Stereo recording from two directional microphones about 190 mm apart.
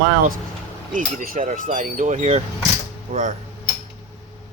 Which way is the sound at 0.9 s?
45° right (ahead or behind).